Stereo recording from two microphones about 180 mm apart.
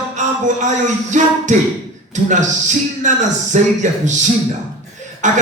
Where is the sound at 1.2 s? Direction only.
45° right (ahead or behind).